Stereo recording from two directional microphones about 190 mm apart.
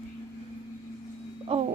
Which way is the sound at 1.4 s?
30° right (ahead or behind).